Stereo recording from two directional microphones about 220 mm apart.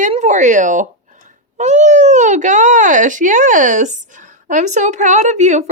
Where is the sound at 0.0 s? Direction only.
35° right (ahead or behind).